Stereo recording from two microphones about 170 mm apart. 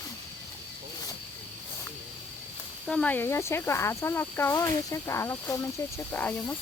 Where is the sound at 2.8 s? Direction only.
5° left (ahead or behind).